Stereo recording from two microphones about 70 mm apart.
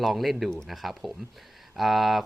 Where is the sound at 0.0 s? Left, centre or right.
Centre.